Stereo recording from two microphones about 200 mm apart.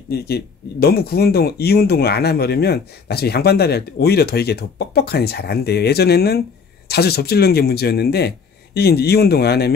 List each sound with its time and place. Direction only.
0.1 s speech: 50° left (ahead or behind)